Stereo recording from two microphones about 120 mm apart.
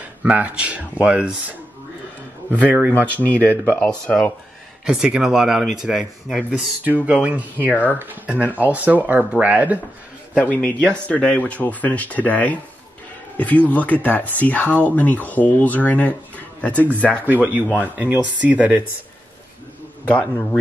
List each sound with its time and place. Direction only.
0.0 s speech: 10° right (ahead or behind)
2.9 s speech: 15° left (ahead or behind)
4.8 s speech: 5° right (ahead or behind)
7.7 s speech: 15° left (ahead or behind)
8.0 s speech: 15° right (ahead or behind)
10.3 s speech: 10° left (ahead or behind)
17.3 s speech: 15° right (ahead or behind)